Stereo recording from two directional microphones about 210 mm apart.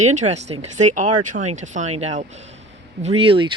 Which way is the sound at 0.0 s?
35° right (ahead or behind).